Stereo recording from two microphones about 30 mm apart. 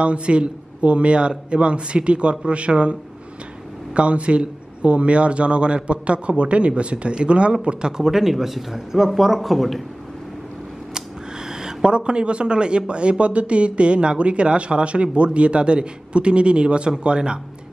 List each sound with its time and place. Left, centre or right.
0.0 s speech: right
8.0 s speech: centre
11.0 s a sound: right
11.9 s speech: right